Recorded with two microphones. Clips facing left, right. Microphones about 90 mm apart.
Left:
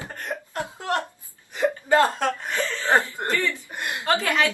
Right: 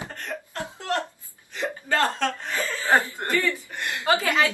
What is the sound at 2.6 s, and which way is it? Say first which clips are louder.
Cough: left 2 dB; 10° right (ahead or behind).